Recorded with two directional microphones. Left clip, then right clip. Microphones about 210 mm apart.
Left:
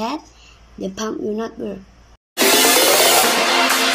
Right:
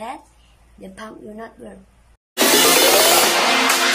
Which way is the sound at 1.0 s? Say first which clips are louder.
Left 11 dB; 20° left (ahead or behind).